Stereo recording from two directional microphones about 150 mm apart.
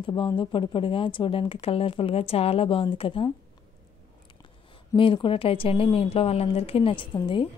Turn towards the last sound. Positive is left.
turn(degrees=30)  # may be behind; listen again after turning